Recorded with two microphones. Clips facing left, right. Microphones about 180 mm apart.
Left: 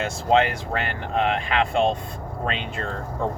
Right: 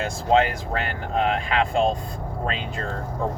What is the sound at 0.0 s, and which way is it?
Speech, 35° right (ahead or behind).